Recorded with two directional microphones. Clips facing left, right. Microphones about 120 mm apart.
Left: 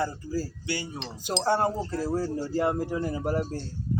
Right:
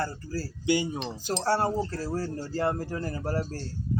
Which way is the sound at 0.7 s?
15° right (ahead or behind).